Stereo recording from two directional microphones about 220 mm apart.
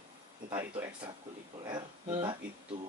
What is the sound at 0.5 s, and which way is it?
Speech, 10° right (ahead or behind).